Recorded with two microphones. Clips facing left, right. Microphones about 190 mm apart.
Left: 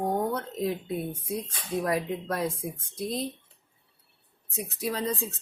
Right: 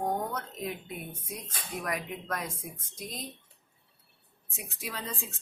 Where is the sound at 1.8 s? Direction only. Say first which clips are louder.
Left 6 dB; 30° left (ahead or behind).